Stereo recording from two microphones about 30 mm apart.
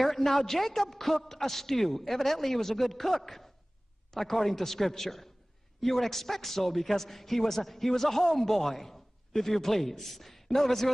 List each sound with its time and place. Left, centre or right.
0.0 s a man's voice: centre